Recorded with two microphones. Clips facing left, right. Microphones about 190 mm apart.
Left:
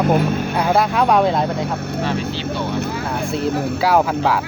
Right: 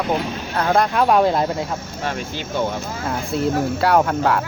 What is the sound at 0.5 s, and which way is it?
Speech, 10° left (ahead or behind).